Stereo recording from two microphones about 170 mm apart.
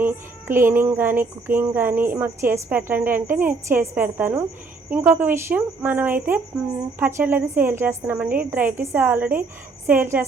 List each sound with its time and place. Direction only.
0.0 s speech: 15° right (ahead or behind)